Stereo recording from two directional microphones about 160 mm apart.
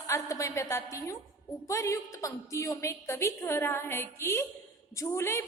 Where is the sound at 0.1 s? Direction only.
20° left (ahead or behind).